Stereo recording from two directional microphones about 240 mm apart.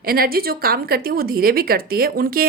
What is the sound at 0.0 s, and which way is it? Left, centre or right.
A woman's voice, right.